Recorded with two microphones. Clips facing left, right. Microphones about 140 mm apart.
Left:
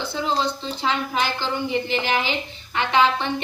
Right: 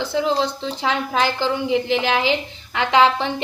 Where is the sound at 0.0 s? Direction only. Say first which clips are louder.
Right 4 dB; 90° right.